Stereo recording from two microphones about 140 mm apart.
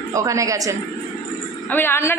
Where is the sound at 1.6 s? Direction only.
15° left (ahead or behind).